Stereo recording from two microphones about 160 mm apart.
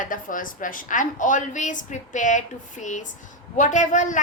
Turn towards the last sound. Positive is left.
turn(degrees=50)  # may be behind; listen again after turning